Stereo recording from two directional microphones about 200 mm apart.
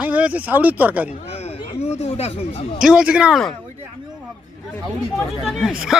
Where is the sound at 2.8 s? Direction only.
5° right (ahead or behind).